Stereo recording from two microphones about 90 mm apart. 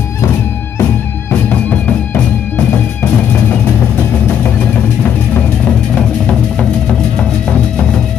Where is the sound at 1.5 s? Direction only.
15° left (ahead or behind).